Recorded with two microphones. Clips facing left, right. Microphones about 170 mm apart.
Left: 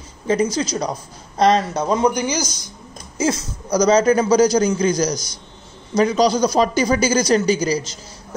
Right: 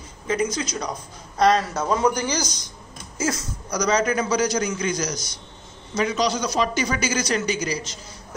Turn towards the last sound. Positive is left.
turn(degrees=35)  # may be behind; listen again after turning